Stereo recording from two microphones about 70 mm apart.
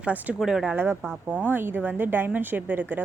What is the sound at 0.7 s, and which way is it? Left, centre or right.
Speech, right.